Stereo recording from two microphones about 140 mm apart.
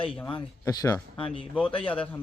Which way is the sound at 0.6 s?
25° left (ahead or behind).